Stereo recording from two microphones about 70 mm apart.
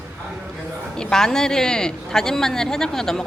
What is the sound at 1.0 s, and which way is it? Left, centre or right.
Speech, centre.